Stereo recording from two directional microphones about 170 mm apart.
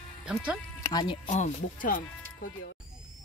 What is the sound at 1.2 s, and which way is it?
Speech, 45° left (ahead or behind).